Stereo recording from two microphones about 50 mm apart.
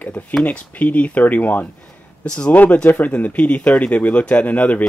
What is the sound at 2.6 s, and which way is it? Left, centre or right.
Speech, left.